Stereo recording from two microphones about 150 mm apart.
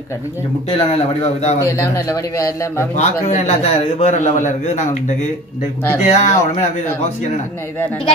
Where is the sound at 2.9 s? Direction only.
50° left (ahead or behind).